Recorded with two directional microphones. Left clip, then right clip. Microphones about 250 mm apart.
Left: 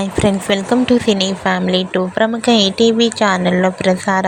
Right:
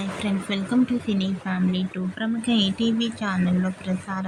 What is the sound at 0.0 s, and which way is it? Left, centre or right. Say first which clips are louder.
Speech: left 13 dB; left.